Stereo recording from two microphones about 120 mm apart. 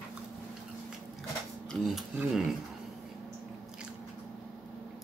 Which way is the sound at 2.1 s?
5° right (ahead or behind).